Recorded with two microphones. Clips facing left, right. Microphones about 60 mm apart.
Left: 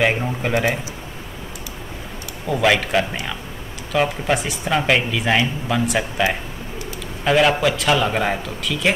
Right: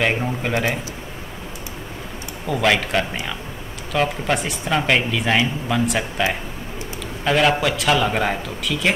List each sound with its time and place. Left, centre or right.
0.0 s speech: centre
2.4 s speech: centre
7.2 s speech: centre